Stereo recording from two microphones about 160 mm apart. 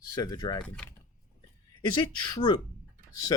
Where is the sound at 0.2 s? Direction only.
25° left (ahead or behind).